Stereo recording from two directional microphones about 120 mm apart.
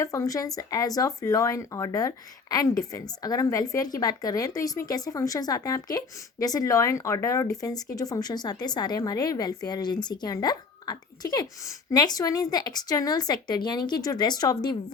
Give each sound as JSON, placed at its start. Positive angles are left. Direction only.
{"t": 0.0, "sound": "speech", "side_deg": 25}